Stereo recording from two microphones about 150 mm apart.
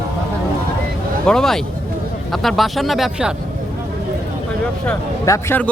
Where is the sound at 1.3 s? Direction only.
5° left (ahead or behind).